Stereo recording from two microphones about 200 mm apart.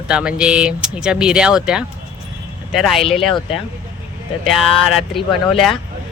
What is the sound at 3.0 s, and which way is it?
Speech, 30° left (ahead or behind).